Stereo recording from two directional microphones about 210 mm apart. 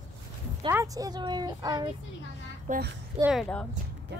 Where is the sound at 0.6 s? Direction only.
15° right (ahead or behind).